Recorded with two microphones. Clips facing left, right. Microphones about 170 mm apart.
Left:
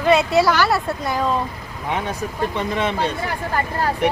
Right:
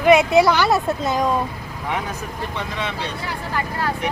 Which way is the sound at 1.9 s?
25° left (ahead or behind).